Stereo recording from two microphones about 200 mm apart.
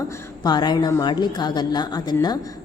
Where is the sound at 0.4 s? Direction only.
20° left (ahead or behind).